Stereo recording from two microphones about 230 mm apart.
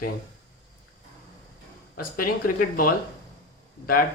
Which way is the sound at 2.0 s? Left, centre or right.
Left.